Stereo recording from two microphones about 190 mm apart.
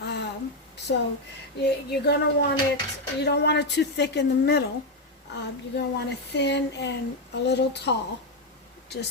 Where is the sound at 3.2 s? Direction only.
60° left (ahead or behind).